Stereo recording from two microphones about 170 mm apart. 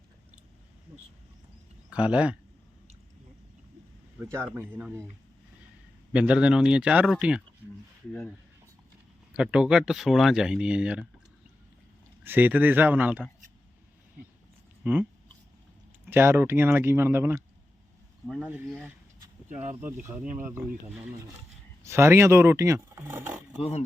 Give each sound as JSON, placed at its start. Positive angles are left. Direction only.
{"t": 1.9, "sound": "speech", "side_deg": -5}
{"t": 4.2, "sound": "speech", "side_deg": -15}
{"t": 6.1, "sound": "speech", "side_deg": -5}
{"t": 9.3, "sound": "speech", "side_deg": -5}
{"t": 12.2, "sound": "speech", "side_deg": -10}
{"t": 14.8, "sound": "speech", "side_deg": -10}
{"t": 16.0, "sound": "speech", "side_deg": -15}
{"t": 18.4, "sound": "speech", "side_deg": -10}
{"t": 19.5, "sound": "speech", "side_deg": -45}
{"t": 20.4, "sound": "speech", "side_deg": -10}
{"t": 23.6, "sound": "speech", "side_deg": 35}